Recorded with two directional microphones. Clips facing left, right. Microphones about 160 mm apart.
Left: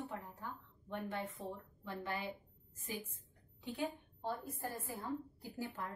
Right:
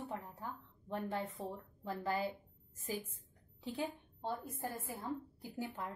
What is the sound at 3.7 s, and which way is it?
A woman's voice, 20° right (ahead or behind).